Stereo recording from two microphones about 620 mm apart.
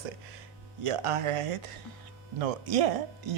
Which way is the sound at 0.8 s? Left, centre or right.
Right.